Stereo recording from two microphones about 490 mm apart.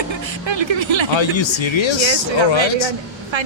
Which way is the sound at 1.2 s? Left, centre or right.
Left.